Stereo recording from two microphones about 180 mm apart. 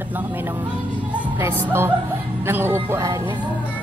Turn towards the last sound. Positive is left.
turn(degrees=-25)  # may be behind; listen again after turning